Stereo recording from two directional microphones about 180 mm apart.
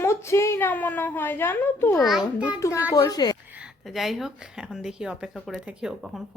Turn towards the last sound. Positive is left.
turn(degrees=-5)  # may be behind; listen again after turning